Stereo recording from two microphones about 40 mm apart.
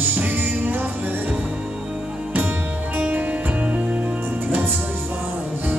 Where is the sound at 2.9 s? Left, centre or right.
Right.